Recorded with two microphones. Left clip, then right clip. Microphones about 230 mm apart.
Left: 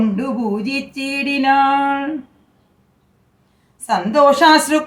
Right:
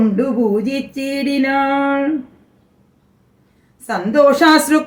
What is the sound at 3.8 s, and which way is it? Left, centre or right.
Speech, centre.